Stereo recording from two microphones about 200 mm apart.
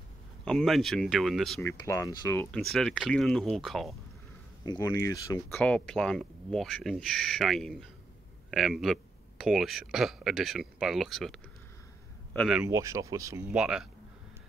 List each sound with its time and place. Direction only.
0.5 s speech: centre (ahead or behind)
1.6 s speech: 15° left (ahead or behind)
4.6 s speech: 15° left (ahead or behind); by 12.6 s centre (ahead or behind)
12.6 s speech: 15° right (ahead or behind)